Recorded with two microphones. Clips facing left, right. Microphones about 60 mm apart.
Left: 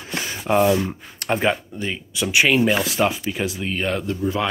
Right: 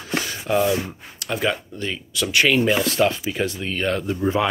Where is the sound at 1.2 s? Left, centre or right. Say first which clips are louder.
Left 3 dB; left.